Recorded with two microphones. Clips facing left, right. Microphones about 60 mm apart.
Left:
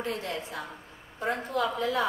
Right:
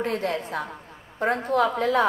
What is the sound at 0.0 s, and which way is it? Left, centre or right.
A woman's voice, right.